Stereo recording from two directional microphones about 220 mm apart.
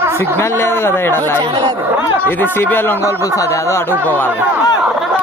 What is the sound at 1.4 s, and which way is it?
Speech, 20° right (ahead or behind).